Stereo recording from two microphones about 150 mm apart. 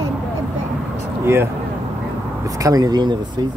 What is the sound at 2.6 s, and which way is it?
Speech, 25° right (ahead or behind).